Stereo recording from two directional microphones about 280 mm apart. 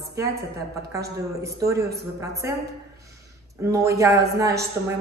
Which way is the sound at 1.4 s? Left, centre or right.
Centre.